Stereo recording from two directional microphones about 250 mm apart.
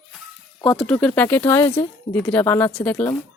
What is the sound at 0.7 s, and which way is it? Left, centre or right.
A woman's voice, centre.